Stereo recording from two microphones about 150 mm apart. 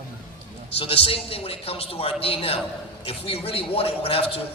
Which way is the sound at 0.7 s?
40° left (ahead or behind).